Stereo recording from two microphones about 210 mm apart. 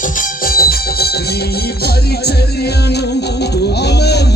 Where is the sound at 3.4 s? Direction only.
50° left (ahead or behind).